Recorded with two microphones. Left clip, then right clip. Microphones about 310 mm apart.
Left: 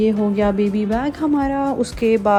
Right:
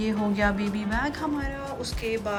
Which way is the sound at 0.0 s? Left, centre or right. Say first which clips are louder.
Left 8 dB; centre.